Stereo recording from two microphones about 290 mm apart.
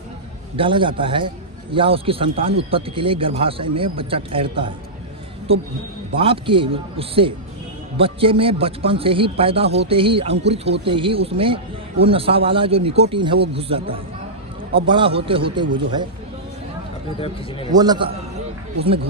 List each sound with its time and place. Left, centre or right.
0.5 s a man's voice: centre
17.2 s speech: centre
17.7 s a man's voice: centre